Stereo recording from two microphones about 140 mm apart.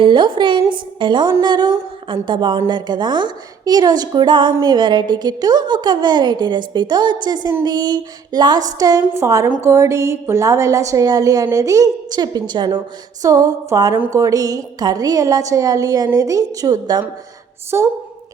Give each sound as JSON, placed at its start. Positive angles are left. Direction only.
{"t": 0.0, "sound": "a woman's voice", "side_deg": -35}
{"t": 17.7, "sound": "a woman's voice", "side_deg": -15}